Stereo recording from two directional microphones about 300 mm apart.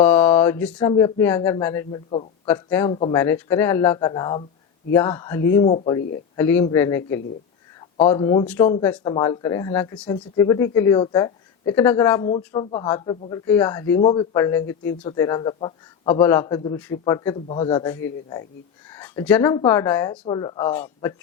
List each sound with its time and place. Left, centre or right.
0.0 s mantra: centre
0.8 s speech: centre